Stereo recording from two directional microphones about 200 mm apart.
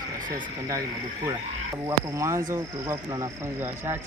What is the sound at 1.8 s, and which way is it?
Speech, 15° right (ahead or behind).